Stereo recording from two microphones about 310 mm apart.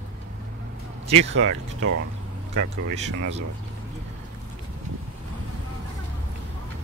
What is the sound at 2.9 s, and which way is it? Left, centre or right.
Speech, right.